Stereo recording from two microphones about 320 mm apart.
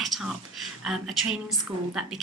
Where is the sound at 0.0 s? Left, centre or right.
Centre.